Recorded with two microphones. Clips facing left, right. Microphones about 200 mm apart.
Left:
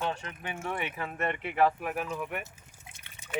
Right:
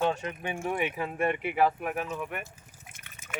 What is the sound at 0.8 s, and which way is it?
Speech, 15° right (ahead or behind).